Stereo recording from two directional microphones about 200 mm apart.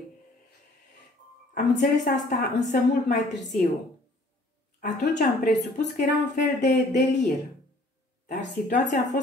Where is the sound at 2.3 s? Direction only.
50° left (ahead or behind).